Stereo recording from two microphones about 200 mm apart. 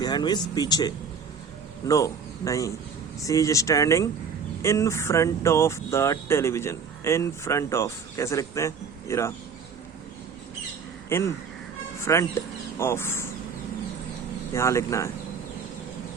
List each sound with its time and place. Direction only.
0.0 s speech: 20° left (ahead or behind)
11.1 s speech: 15° left (ahead or behind)
14.5 s speech: 15° left (ahead or behind)